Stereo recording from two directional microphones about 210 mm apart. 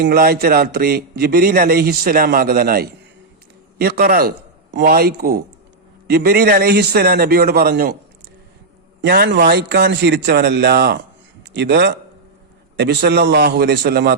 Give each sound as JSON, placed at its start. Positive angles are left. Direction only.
{"t": 0.0, "sound": "a man's voice", "side_deg": -45}
{"t": 9.0, "sound": "a man's voice", "side_deg": -55}